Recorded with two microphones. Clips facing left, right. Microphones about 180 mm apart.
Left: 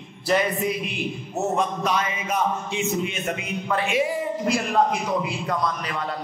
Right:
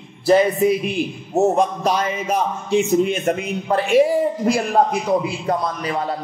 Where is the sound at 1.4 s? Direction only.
30° right (ahead or behind).